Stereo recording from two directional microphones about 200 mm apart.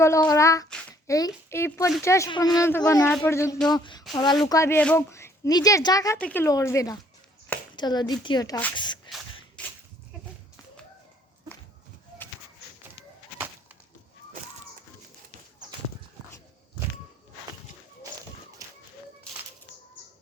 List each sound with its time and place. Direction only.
0.0 s a child's voice: 15° left (ahead or behind)
9.6 s goat: 5° left (ahead or behind)